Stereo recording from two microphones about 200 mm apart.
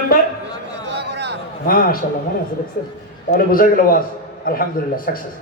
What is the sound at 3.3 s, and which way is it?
A man's voice, 45° left (ahead or behind).